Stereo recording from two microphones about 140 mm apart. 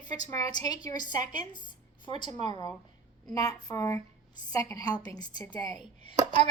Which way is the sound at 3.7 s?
20° left (ahead or behind).